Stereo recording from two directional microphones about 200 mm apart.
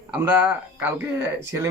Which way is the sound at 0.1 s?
10° right (ahead or behind).